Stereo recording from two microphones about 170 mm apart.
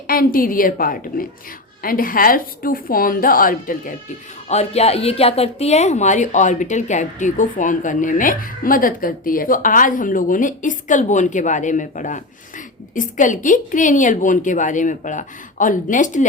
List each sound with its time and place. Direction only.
0.1 s a woman's voice: 55° left (ahead or behind)
4.4 s a woman's voice: 40° left (ahead or behind)